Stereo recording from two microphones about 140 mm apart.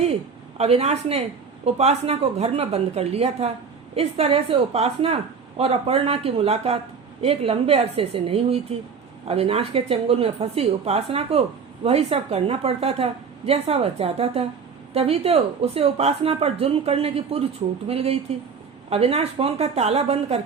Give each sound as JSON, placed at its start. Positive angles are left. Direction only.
{"t": 0.5, "sound": "speech", "side_deg": -50}